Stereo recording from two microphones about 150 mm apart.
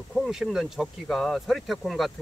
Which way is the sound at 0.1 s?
Centre (ahead or behind).